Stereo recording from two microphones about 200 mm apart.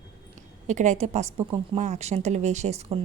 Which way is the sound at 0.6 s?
35° right (ahead or behind).